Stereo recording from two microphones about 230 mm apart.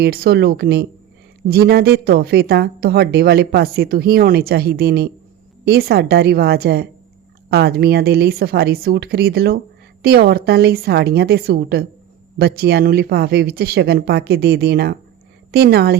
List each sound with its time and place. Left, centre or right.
0.0 s speech: right